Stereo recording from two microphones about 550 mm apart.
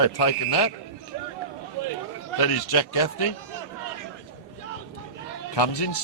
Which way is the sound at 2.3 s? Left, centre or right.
Left.